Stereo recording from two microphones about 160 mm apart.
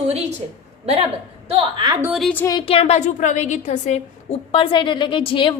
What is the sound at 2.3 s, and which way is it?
Speech, 20° left (ahead or behind).